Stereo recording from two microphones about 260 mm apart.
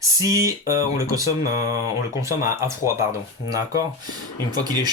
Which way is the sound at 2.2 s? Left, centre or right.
Centre.